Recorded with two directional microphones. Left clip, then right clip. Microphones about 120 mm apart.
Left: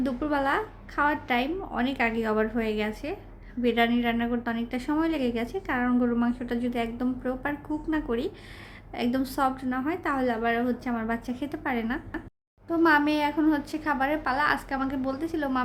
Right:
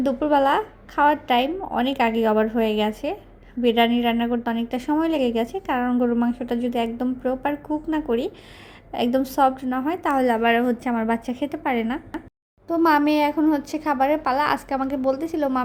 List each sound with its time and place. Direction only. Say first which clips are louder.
0.0 s a woman's voice: right 8 dB; 45° right (ahead or behind)
10.2 s a woman's voice: right 7 dB; 60° right (ahead or behind); by 15.4 s 45° right (ahead or behind)